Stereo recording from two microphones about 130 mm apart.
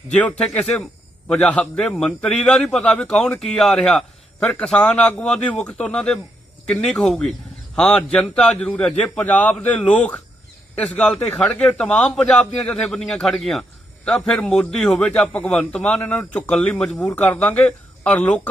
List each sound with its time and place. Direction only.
0.3 s a man's voice: 5° left (ahead or behind)